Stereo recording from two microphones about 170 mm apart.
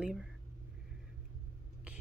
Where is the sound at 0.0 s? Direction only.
5° right (ahead or behind).